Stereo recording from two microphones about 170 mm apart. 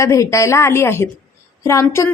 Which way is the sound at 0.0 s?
20° left (ahead or behind).